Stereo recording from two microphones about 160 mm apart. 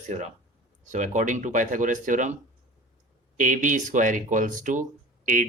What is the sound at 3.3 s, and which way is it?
Speech, 55° right (ahead or behind).